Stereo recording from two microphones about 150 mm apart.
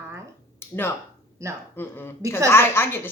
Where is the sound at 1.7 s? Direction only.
15° left (ahead or behind).